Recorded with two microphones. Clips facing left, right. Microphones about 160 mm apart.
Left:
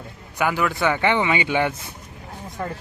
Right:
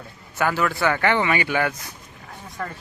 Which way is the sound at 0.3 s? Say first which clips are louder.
Even; 15° left (ahead or behind).